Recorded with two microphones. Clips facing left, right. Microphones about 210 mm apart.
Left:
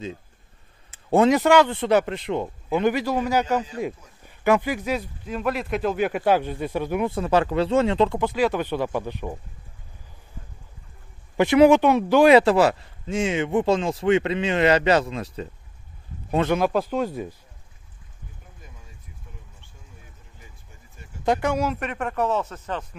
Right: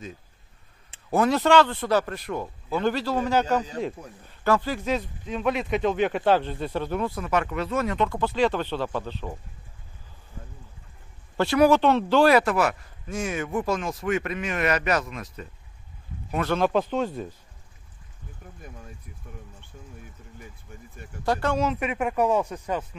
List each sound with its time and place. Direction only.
1.1 s speech: 25° left (ahead or behind)
1.4 s speech: 10° left (ahead or behind)
7.1 s speech: 30° left (ahead or behind)
8.2 s speech: 10° left (ahead or behind)
11.3 s speech: 20° left (ahead or behind)
12.4 s speech: 30° left (ahead or behind)
16.5 s speech: 10° left (ahead or behind)
21.3 s speech: 10° left (ahead or behind)
21.7 s speech: 5° right (ahead or behind)